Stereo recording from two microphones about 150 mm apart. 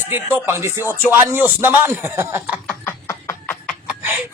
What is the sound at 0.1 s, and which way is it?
A man's voice, 15° right (ahead or behind).